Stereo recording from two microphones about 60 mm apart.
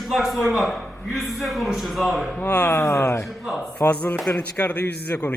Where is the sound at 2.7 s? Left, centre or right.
Left.